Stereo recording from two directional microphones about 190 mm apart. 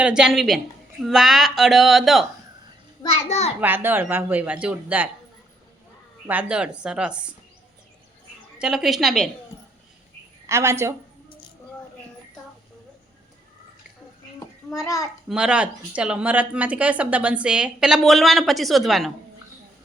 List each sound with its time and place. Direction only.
0.0 s speech: 5° right (ahead or behind)
3.0 s a child's voice: 30° left (ahead or behind)
3.6 s speech: 10° right (ahead or behind)
6.2 s speech: 5° right (ahead or behind)
8.5 s speech: 5° right (ahead or behind)
10.4 s speech: 15° right (ahead or behind)
14.3 s a sound: 15° left (ahead or behind)
15.3 s speech: 5° right (ahead or behind)